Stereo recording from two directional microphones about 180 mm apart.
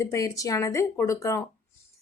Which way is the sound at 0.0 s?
20° left (ahead or behind).